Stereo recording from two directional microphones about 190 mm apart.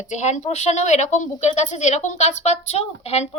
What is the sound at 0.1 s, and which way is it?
A woman's voice, 40° left (ahead or behind).